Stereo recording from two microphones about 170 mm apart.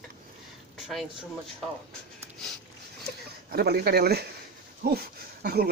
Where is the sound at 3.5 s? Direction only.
65° right (ahead or behind).